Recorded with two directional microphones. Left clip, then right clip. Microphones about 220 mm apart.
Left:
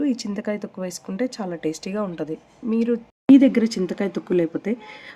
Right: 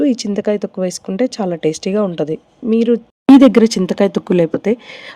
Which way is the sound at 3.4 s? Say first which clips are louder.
Right 9 dB; 50° right (ahead or behind).